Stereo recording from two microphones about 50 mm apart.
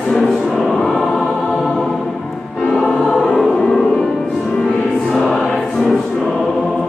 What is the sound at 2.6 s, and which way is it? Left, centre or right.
Choir, centre.